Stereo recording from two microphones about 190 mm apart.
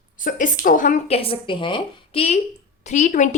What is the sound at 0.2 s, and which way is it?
Speech, 45° left (ahead or behind).